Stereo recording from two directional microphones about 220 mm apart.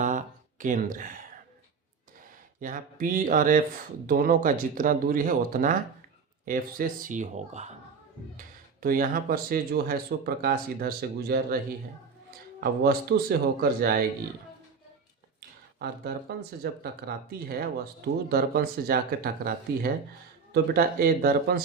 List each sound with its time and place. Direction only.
0.0 s a sound: 35° right (ahead or behind)
2.6 s speech: 40° right (ahead or behind)
15.4 s speech: 45° right (ahead or behind)